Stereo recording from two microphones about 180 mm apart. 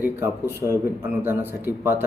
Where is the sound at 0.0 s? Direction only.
15° right (ahead or behind).